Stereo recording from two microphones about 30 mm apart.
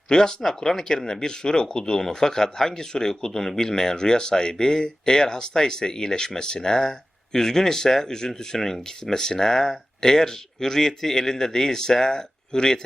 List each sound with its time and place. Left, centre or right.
0.1 s speech: left